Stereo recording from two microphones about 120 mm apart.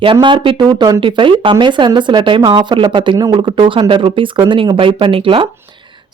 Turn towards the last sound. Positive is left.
turn(degrees=-45)  # may be behind; listen again after turning